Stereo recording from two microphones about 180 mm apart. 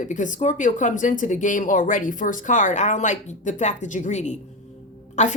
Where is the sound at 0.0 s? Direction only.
45° left (ahead or behind).